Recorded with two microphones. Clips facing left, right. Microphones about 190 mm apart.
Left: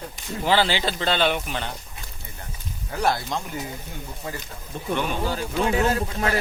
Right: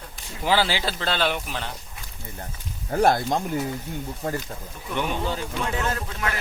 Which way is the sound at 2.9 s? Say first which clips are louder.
Right 4 dB; 50° right (ahead or behind).